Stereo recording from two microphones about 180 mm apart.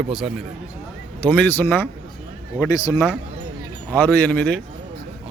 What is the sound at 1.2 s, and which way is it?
A man's voice, 10° left (ahead or behind).